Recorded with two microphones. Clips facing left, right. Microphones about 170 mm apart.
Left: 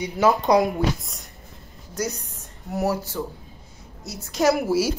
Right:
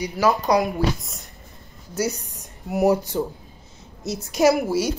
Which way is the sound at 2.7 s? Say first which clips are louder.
Right 5 dB; 15° right (ahead or behind).